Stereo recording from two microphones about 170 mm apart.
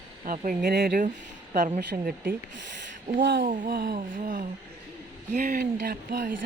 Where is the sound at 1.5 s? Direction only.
45° right (ahead or behind).